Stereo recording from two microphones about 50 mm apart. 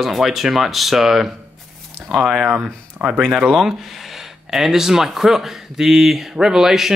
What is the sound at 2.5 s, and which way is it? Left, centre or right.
Speech, right.